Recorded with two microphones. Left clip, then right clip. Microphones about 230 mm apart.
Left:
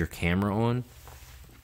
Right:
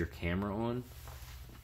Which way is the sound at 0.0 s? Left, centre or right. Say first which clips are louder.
Left 8 dB; left.